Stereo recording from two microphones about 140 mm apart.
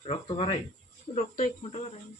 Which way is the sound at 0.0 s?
45° left (ahead or behind).